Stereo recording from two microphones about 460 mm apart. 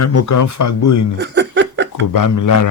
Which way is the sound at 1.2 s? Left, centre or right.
Right.